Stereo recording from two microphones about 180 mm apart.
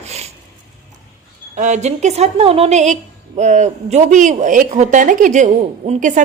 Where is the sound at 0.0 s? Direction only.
35° right (ahead or behind).